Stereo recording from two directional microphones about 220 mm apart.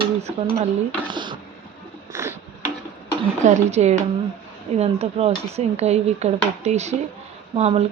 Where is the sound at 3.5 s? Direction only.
30° right (ahead or behind).